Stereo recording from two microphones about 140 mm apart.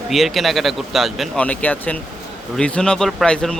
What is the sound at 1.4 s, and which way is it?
A man's voice, 10° left (ahead or behind).